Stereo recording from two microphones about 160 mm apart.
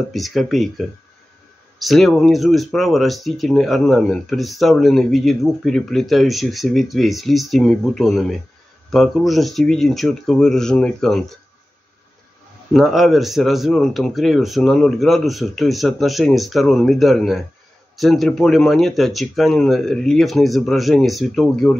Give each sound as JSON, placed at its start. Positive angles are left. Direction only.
{"t": 0.1, "sound": "speech", "side_deg": 0}
{"t": 12.7, "sound": "speech", "side_deg": 0}